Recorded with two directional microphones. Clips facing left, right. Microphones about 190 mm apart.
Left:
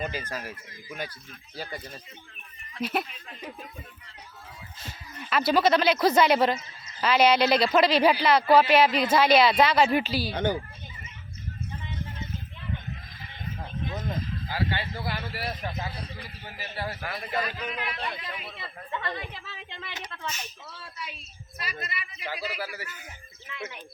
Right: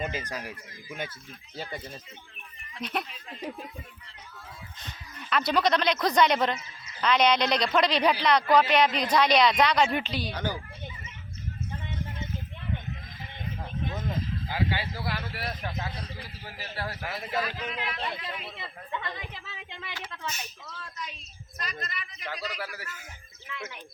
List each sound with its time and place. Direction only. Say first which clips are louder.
0.0 s speech: even; 20° right (ahead or behind)
2.8 s a man's voice: left 4 dB; 5° left (ahead or behind)
4.8 s a man's voice: left 3 dB; 5° left (ahead or behind)
10.3 s speech: left 8 dB; 25° left (ahead or behind)
14.5 s a man's voice: even; 10° right (ahead or behind)
18.5 s speech: left 1 dB; 15° right (ahead or behind)
20.7 s a man's voice: even; 5° left (ahead or behind)